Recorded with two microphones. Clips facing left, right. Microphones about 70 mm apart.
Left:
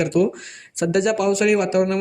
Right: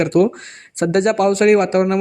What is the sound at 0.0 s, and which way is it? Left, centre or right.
Speech, right.